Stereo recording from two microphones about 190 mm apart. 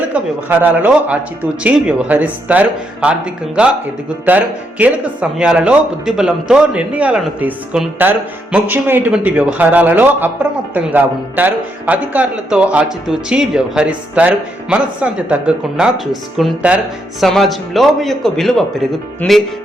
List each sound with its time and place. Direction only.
0.1 s speech: 10° right (ahead or behind)